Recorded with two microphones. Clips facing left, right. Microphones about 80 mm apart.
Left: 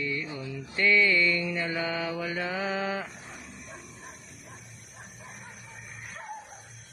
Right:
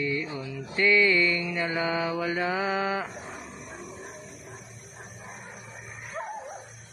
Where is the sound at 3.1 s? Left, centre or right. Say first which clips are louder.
Right 5 dB; right.